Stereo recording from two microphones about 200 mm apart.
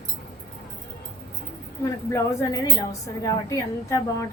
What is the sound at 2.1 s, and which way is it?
A woman's voice, 15° left (ahead or behind).